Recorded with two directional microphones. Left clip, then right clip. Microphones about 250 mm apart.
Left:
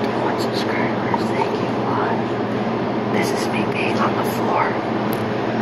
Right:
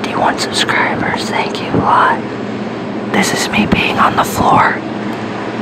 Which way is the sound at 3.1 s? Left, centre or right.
Right.